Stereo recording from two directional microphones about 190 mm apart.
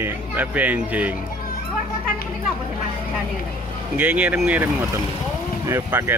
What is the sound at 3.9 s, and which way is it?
Speech, 10° right (ahead or behind).